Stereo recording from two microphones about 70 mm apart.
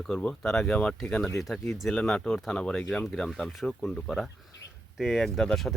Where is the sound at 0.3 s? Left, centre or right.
Centre.